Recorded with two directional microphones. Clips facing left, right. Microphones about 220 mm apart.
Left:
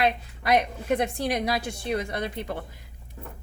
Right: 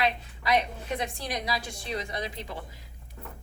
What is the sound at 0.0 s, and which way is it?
A woman's voice, 55° left (ahead or behind).